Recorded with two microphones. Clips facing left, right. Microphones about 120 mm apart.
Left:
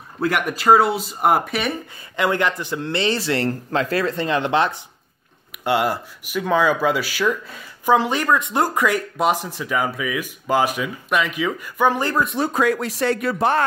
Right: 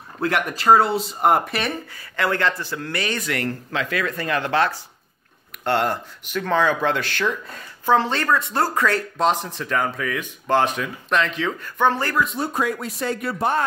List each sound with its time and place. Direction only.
0.2 s speech: 5° left (ahead or behind)
2.1 s a man's voice: 15° left (ahead or behind)
12.3 s speech: 85° left